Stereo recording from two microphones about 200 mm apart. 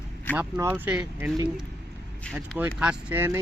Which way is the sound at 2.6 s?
5° right (ahead or behind).